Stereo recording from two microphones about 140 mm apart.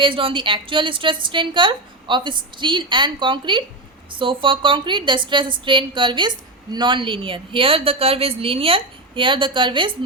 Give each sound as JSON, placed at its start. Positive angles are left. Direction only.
{"t": 0.0, "sound": "a woman's voice", "side_deg": -40}